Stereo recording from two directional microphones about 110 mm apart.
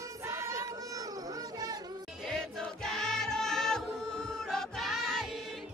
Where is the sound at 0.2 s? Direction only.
25° right (ahead or behind).